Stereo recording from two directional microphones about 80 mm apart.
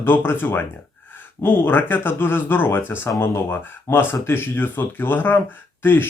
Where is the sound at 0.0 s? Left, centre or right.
Left.